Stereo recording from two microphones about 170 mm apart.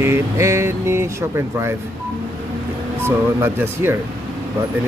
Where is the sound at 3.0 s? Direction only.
15° right (ahead or behind).